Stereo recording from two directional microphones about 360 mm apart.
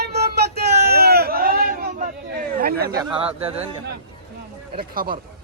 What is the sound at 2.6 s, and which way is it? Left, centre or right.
Speech, right.